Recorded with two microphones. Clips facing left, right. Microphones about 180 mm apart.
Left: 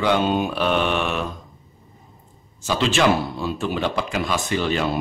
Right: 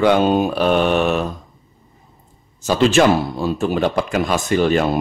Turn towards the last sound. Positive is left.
turn(degrees=-45)  # may be behind; listen again after turning